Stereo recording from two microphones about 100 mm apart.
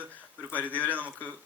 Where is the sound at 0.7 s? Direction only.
15° left (ahead or behind).